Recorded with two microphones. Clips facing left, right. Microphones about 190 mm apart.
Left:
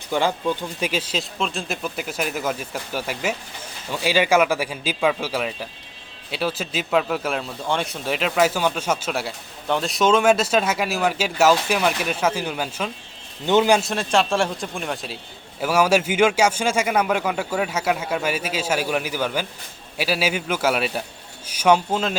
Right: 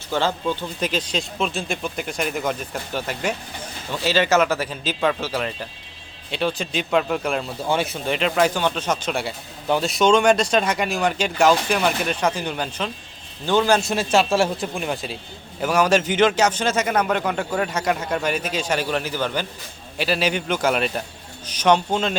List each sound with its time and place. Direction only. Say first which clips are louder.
0.1 s a man's voice: left 1 dB; 15° left (ahead or behind)
13.4 s a man's voice: left 2 dB; 20° left (ahead or behind)
13.7 s a man's voice: right 1 dB; centre (ahead or behind)